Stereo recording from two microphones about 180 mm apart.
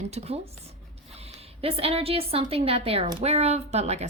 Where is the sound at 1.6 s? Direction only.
35° right (ahead or behind).